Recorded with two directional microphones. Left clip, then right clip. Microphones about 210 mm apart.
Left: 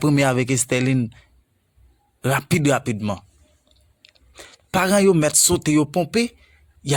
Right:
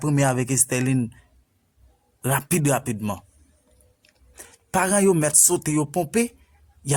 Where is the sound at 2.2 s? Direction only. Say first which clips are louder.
Left 3 dB; 30° left (ahead or behind).